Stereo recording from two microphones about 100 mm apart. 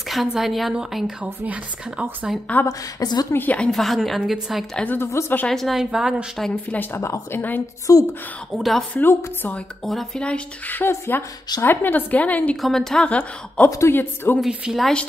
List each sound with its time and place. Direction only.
0.1 s a woman's voice: centre (ahead or behind)
2.6 s speech: 25° left (ahead or behind)
3.0 s a woman's voice: 40° left (ahead or behind)
3.3 s a woman's voice: 15° left (ahead or behind); by 4.6 s centre (ahead or behind)
4.8 s speech: 25° left (ahead or behind)
5.5 s a woman's voice: centre (ahead or behind)
6.5 s a woman's voice: 15° left (ahead or behind); by 8.0 s 35° left (ahead or behind)
8.5 s a woman's voice: centre (ahead or behind)
8.9 s speech: 15° left (ahead or behind)
9.8 s speech: 5° left (ahead or behind)
12.6 s speech: 5° left (ahead or behind)
13.7 s speech: 30° left (ahead or behind)
14.4 s speech: 5° right (ahead or behind)
14.8 s speech: 5° left (ahead or behind)